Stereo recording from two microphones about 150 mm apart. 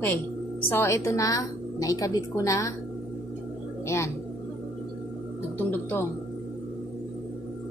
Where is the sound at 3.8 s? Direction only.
20° left (ahead or behind).